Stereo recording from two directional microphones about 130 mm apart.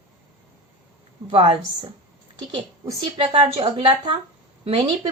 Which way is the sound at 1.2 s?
45° right (ahead or behind).